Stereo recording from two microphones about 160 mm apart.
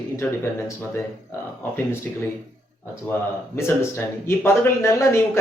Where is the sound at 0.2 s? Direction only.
10° left (ahead or behind).